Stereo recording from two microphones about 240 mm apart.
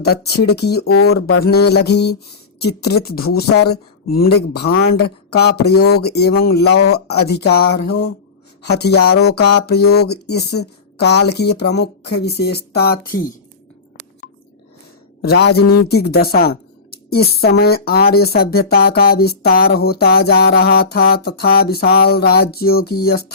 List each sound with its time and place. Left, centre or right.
0.0 s a woman's voice: left
6.7 s speech: left
7.1 s speech: left
9.0 s a sound: left
9.6 s speech: left
15.2 s a woman's voice: left